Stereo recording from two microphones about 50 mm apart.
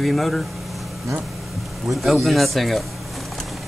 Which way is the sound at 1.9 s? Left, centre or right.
Centre.